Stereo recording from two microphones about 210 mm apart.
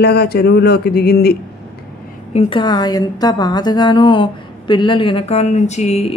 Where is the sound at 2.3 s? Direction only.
25° left (ahead or behind).